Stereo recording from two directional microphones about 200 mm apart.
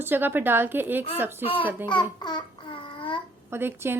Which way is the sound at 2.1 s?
20° left (ahead or behind).